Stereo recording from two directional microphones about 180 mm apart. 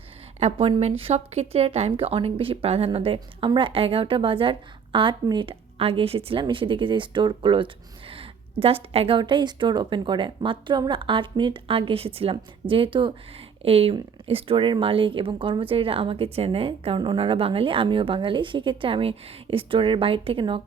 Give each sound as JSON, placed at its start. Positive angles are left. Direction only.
{"t": 0.3, "sound": "speech", "side_deg": -35}